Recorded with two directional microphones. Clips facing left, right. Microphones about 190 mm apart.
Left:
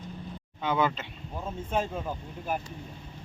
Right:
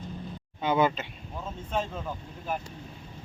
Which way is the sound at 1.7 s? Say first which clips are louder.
Left 1 dB; 10° left (ahead or behind).